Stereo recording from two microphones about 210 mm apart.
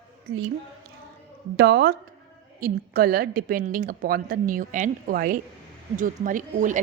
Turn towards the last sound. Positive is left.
turn(degrees=-40)  # may be behind; listen again after turning